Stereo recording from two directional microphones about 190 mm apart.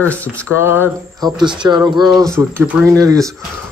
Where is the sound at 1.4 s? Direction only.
25° right (ahead or behind).